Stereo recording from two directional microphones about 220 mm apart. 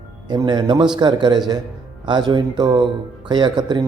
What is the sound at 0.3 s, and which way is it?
Speech, 20° right (ahead or behind).